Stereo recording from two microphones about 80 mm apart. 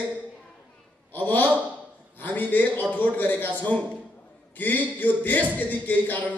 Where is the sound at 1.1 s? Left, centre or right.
Left.